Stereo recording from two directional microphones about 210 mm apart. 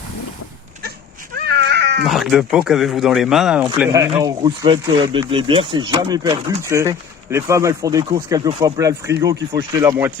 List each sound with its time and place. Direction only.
1.5 s cat: 55° right (ahead or behind)
2.0 s speech: centre (ahead or behind)
3.9 s speech: 15° right (ahead or behind)